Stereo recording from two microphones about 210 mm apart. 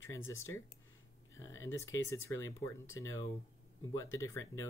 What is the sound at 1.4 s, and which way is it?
Speech, 15° left (ahead or behind).